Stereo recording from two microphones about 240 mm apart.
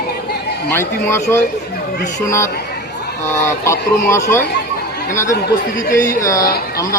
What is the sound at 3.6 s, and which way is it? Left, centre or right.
Speech, centre.